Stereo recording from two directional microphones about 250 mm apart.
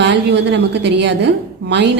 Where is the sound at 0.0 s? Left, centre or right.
Right.